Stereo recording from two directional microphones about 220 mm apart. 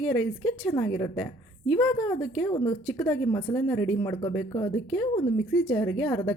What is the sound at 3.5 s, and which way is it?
Speech, 10° left (ahead or behind).